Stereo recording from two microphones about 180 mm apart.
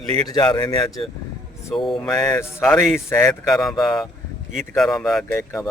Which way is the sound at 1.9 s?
5° left (ahead or behind).